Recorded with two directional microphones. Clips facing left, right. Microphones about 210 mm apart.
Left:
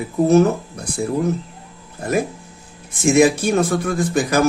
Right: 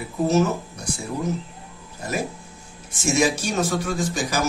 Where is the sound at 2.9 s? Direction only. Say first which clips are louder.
Left 7 dB; 55° left (ahead or behind).